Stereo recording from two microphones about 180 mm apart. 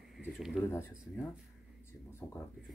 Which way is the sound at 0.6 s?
15° left (ahead or behind).